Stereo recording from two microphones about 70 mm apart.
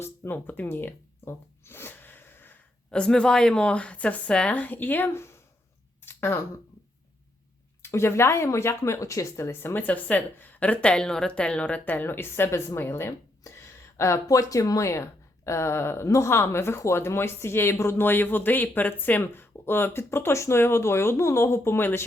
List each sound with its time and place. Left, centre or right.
0.0 s zipper: left
2.9 s a woman's voice: centre; by 5.4 s left
6.0 s a sound: left
7.8 s speech: left